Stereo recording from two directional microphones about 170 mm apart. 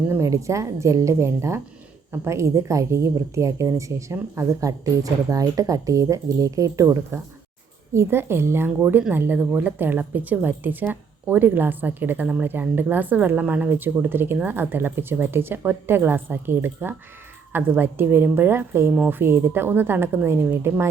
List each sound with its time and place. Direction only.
0.1 s a woman's voice: 20° right (ahead or behind)